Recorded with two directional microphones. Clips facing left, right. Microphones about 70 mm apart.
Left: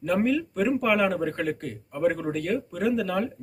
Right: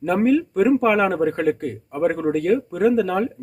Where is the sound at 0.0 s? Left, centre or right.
Right.